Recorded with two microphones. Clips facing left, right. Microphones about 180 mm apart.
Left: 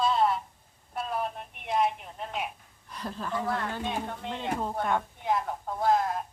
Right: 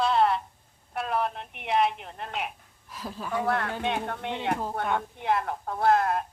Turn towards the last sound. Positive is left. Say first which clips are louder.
# right 3 dB
turn(degrees=-65)  # may be behind; listen again after turning